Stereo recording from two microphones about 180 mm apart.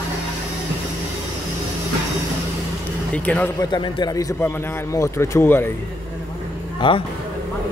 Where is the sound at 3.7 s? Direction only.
25° left (ahead or behind).